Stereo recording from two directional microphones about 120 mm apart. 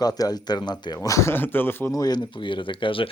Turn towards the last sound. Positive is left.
turn(degrees=45)  # may be behind; listen again after turning